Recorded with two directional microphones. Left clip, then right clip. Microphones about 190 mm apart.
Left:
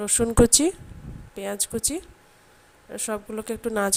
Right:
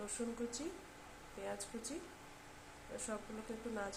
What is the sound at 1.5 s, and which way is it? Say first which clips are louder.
Speech: left 17 dB; 55° left (ahead or behind).